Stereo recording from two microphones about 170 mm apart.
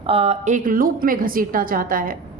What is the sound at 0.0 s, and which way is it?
A woman's voice, 35° right (ahead or behind).